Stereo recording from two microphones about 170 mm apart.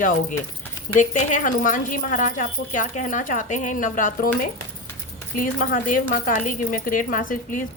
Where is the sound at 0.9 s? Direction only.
50° left (ahead or behind).